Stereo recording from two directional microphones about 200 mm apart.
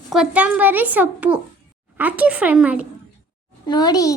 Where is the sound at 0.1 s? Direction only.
5° right (ahead or behind).